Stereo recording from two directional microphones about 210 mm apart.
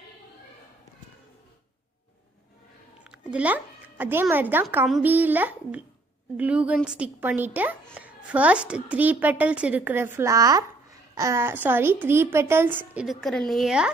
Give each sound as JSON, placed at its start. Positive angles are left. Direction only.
{"t": 3.0, "sound": "a woman's voice", "side_deg": -5}